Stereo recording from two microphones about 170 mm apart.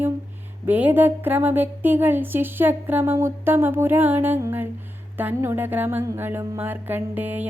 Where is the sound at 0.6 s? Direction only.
10° right (ahead or behind).